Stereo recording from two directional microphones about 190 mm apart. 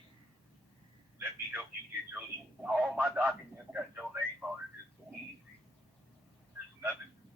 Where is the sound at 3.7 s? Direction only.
10° right (ahead or behind).